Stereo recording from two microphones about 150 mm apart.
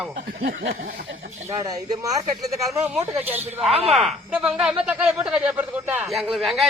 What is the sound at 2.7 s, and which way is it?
Speech, 10° right (ahead or behind).